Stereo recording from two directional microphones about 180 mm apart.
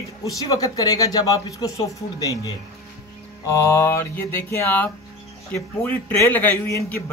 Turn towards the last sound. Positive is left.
turn(degrees=10)  # may be behind; listen again after turning